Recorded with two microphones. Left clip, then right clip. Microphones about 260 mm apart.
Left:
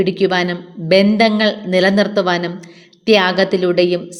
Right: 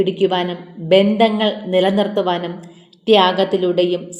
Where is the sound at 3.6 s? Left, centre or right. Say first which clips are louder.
Left 2 dB; left.